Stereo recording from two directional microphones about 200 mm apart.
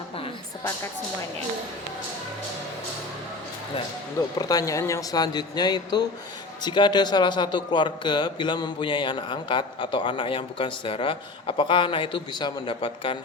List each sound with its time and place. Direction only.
4.4 s speech: 20° left (ahead or behind)